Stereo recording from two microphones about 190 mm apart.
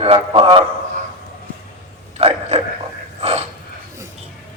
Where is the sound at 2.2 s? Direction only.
30° right (ahead or behind).